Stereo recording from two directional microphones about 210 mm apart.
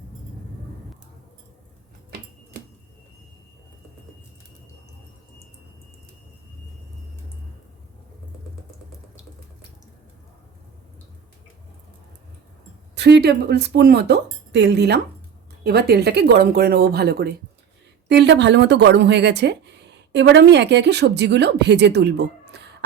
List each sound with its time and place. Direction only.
13.0 s a woman's voice: 50° right (ahead or behind)